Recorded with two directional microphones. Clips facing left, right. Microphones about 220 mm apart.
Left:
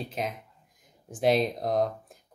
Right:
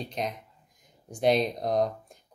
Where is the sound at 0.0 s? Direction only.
5° left (ahead or behind).